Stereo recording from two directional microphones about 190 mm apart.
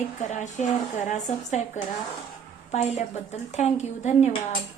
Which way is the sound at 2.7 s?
35° left (ahead or behind).